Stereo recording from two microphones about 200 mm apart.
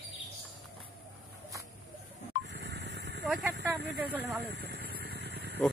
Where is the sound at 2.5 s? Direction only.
60° right (ahead or behind).